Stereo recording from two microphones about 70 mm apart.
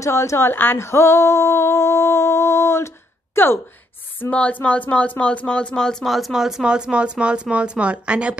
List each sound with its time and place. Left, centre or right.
0.0 s a sound: left
3.4 s speech: left
4.3 s speech: centre
6.0 s speech: centre